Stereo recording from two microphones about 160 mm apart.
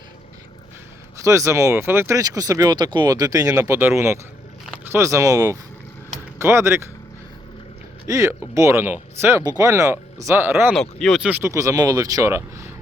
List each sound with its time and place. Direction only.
1.2 s speech: 20° right (ahead or behind)
8.0 s speech: 20° right (ahead or behind)
10.7 s speech: centre (ahead or behind); by 12.7 s 15° right (ahead or behind)